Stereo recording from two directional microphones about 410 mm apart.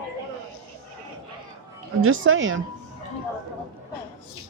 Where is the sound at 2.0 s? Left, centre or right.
Right.